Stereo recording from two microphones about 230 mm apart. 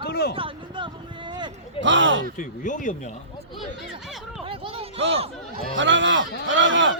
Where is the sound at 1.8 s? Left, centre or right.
Right.